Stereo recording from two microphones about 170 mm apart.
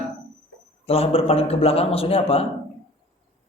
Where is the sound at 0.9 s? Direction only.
35° left (ahead or behind).